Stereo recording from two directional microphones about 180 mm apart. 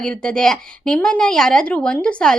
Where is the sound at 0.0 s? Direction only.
5° left (ahead or behind).